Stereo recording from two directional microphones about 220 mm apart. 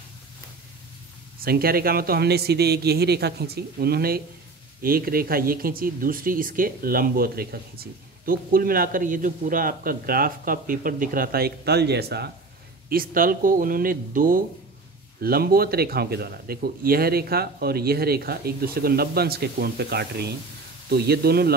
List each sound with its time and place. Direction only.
1.4 s speech: 45° right (ahead or behind)